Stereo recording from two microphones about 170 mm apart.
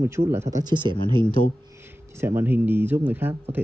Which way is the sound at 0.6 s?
25° right (ahead or behind).